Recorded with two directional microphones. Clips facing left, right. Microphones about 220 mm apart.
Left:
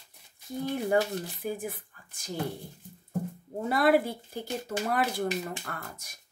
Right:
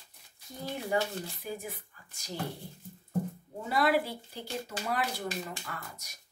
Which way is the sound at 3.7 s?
50° left (ahead or behind).